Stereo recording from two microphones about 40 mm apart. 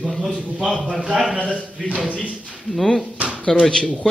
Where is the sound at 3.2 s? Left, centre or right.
Right.